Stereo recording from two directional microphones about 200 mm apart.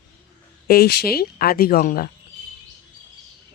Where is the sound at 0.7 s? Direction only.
50° left (ahead or behind).